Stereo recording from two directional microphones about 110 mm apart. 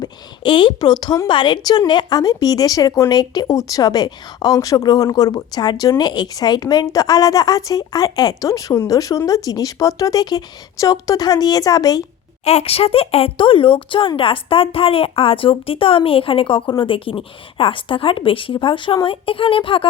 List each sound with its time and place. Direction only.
0.0 s a woman's voice: 45° left (ahead or behind)
12.5 s speech: 70° left (ahead or behind); by 19.9 s 55° left (ahead or behind)